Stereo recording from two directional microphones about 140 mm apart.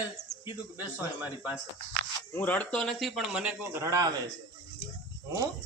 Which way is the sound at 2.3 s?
10° left (ahead or behind).